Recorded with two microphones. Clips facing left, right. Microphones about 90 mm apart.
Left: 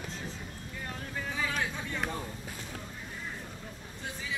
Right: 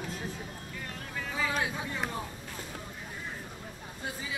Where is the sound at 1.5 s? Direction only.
10° right (ahead or behind).